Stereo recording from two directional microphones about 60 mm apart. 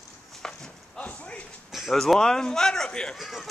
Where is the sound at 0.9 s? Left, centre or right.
Left.